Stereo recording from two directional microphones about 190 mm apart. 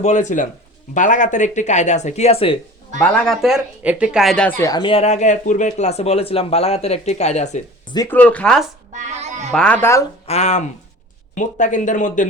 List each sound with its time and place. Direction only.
0.0 s speech: 40° left (ahead or behind)
3.0 s speech: 5° left (ahead or behind); by 7.6 s 35° left (ahead or behind)
7.9 s speech: 10° left (ahead or behind)
8.9 s music: 40° right (ahead or behind)
9.5 s speech: 5° left (ahead or behind)
10.2 s speech: 35° left (ahead or behind)